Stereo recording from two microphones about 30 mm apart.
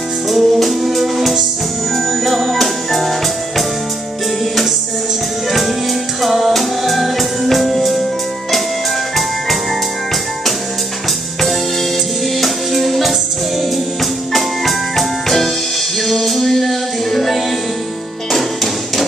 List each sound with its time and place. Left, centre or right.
0.3 s music: centre
2.0 s music: centre
6.2 s music: centre
12.4 s music: centre
14.3 s music: centre